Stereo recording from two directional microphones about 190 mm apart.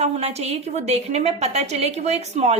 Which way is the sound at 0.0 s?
35° right (ahead or behind).